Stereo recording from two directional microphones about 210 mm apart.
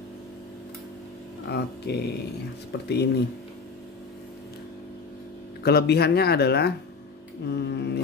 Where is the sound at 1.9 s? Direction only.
55° left (ahead or behind).